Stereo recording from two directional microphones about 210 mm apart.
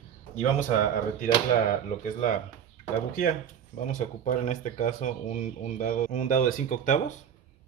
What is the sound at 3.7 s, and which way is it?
Speech, 35° left (ahead or behind).